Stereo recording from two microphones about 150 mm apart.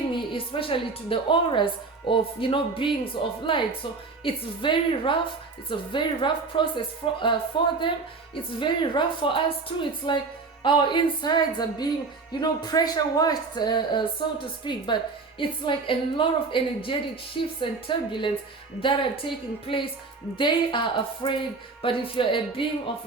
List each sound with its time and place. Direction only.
0.1 s a woman's voice: 35° left (ahead or behind)